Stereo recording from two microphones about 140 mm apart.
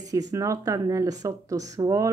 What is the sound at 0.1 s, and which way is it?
Speech, 25° right (ahead or behind).